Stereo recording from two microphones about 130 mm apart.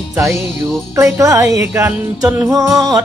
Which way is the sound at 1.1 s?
25° right (ahead or behind).